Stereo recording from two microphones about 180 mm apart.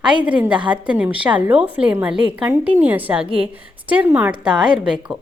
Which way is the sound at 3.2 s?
30° right (ahead or behind).